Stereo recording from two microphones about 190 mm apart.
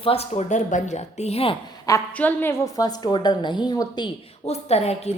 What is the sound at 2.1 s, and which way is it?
A woman's voice, 10° left (ahead or behind).